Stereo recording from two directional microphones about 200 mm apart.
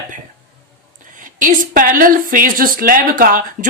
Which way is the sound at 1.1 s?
40° right (ahead or behind).